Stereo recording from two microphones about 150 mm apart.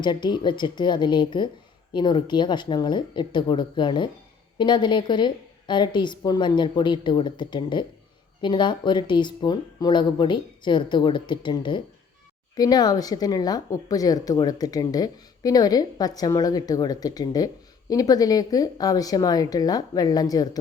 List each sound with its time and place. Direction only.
0.0 s speech: 30° left (ahead or behind)